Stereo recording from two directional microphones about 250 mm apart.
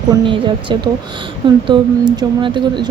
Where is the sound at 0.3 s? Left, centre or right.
Centre.